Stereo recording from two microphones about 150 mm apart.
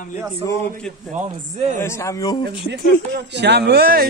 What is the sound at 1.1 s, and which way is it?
Speech, 50° right (ahead or behind).